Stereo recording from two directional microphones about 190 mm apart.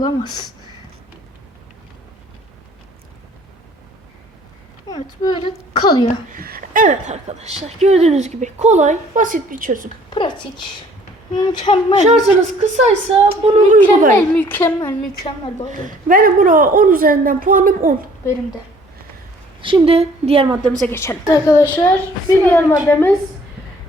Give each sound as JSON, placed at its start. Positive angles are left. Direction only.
{"t": 0.0, "sound": "a woman's voice", "side_deg": 20}
{"t": 4.9, "sound": "a sound", "side_deg": 20}
{"t": 5.2, "sound": "a woman's voice", "side_deg": 25}
{"t": 6.3, "sound": "a woman's voice", "side_deg": -50}
{"t": 10.1, "sound": "a woman's voice", "side_deg": 25}
{"t": 12.0, "sound": "a woman's voice", "side_deg": -40}
{"t": 14.2, "sound": "a woman's voice", "side_deg": 10}
{"t": 15.8, "sound": "a woman's voice", "side_deg": -45}
{"t": 19.6, "sound": "a woman's voice", "side_deg": -30}
{"t": 20.8, "sound": "a woman's voice", "side_deg": 10}